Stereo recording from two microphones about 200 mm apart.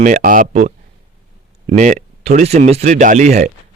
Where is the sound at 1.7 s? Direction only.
40° right (ahead or behind).